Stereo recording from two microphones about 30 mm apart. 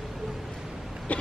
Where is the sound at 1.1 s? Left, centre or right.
Left.